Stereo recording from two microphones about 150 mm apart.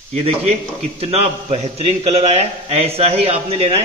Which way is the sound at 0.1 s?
45° right (ahead or behind).